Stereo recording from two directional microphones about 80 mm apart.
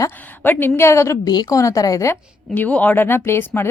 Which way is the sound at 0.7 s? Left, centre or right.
Left.